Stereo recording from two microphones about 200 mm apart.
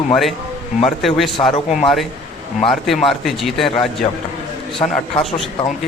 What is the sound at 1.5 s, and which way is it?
Speech, 35° left (ahead or behind).